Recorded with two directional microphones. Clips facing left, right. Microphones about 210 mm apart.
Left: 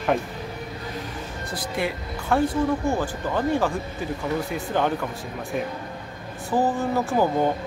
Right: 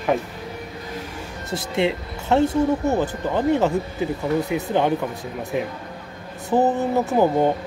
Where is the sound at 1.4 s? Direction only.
25° right (ahead or behind).